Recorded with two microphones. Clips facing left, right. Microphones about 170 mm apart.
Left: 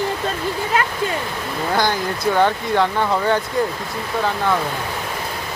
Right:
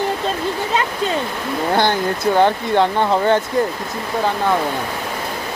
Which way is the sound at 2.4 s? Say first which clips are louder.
Right 2 dB; 20° right (ahead or behind).